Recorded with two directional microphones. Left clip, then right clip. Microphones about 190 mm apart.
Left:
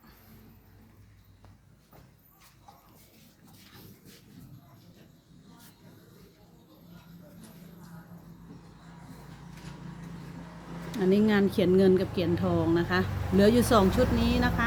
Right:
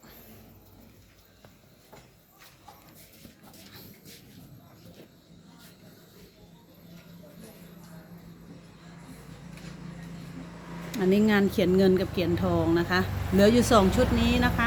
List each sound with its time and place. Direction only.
10.9 s speech: centre (ahead or behind)